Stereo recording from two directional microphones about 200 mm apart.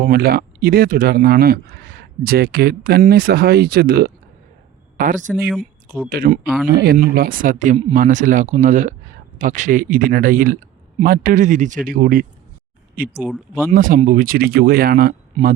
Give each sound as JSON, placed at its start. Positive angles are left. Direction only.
{"t": 0.0, "sound": "speech", "side_deg": -50}
{"t": 4.9, "sound": "speech", "side_deg": -40}
{"t": 13.1, "sound": "speech", "side_deg": -5}
{"t": 13.5, "sound": "speech", "side_deg": -40}